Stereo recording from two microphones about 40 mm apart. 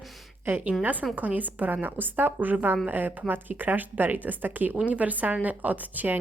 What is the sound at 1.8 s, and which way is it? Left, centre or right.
Speech, right.